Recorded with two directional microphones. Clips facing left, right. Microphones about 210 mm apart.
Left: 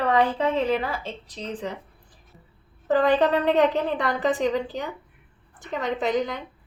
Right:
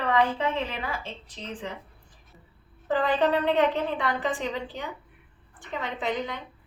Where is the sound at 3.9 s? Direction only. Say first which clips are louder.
Left 4 dB; 40° left (ahead or behind).